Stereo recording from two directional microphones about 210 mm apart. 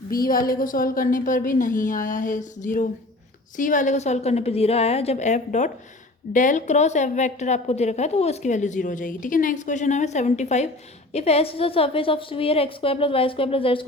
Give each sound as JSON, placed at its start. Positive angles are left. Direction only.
{"t": 0.1, "sound": "a woman's voice", "side_deg": 45}